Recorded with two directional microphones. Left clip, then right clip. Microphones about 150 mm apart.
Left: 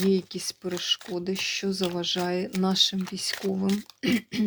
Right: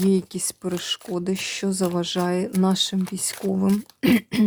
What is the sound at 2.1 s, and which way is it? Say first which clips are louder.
Speech: right 4 dB; 30° right (ahead or behind).